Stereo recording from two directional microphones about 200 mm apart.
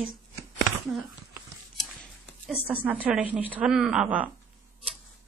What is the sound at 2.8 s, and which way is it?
A woman's voice, 5° right (ahead or behind).